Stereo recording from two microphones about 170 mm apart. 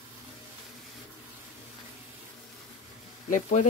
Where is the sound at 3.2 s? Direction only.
50° left (ahead or behind).